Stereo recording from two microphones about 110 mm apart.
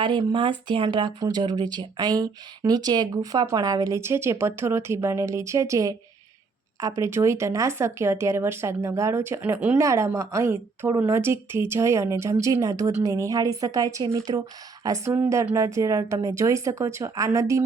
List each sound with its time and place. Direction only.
0.0 s speech: 45° right (ahead or behind); by 17.6 s 30° right (ahead or behind)